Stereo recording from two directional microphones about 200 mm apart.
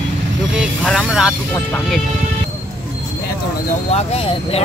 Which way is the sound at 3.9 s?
30° left (ahead or behind).